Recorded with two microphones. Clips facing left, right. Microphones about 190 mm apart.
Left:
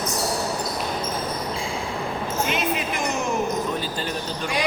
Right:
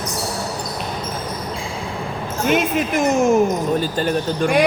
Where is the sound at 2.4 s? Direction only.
50° right (ahead or behind).